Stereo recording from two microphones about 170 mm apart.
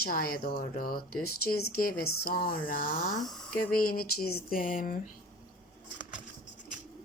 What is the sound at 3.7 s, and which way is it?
Speech, 60° left (ahead or behind).